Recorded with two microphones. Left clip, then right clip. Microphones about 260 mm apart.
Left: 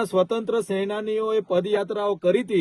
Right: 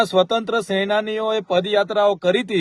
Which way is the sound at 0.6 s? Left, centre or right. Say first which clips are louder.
Right 6 dB; right.